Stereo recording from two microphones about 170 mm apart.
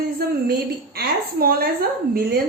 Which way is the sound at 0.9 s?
60° right (ahead or behind).